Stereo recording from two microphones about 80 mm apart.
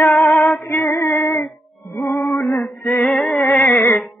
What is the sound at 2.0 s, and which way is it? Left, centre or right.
Music, left.